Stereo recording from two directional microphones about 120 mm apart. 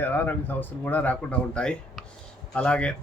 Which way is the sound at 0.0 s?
15° left (ahead or behind).